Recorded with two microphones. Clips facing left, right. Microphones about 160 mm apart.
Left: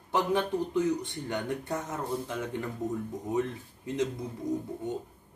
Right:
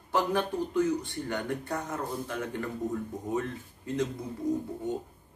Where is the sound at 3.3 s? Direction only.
20° left (ahead or behind).